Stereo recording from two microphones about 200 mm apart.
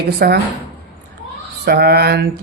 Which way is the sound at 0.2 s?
50° right (ahead or behind).